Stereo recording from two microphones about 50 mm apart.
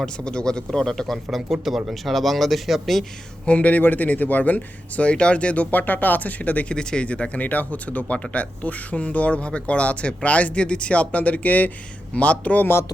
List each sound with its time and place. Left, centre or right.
0.0 s a man's voice: centre
3.4 s speech: left
5.7 s speech: left
6.7 s speech: left